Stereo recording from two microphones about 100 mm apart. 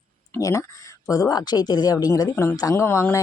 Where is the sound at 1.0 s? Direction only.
35° left (ahead or behind).